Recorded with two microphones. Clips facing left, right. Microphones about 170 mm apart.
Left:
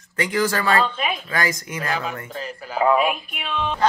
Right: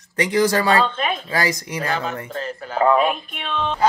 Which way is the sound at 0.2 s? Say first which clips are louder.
Right 4 dB; 35° right (ahead or behind).